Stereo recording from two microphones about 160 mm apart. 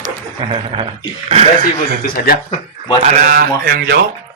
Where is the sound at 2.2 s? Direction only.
65° left (ahead or behind).